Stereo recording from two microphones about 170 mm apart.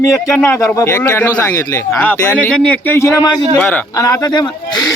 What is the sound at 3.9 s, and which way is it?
Speech, 20° left (ahead or behind).